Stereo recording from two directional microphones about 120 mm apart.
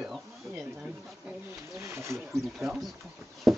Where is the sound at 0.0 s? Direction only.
Centre (ahead or behind).